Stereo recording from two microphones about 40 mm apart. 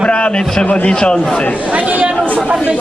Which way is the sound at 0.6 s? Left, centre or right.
Left.